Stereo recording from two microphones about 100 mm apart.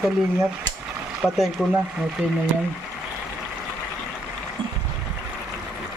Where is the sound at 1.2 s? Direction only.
15° left (ahead or behind).